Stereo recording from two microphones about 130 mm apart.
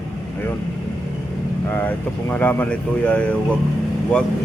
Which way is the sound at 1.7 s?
15° left (ahead or behind).